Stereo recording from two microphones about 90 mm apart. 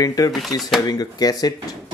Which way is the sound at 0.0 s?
40° left (ahead or behind).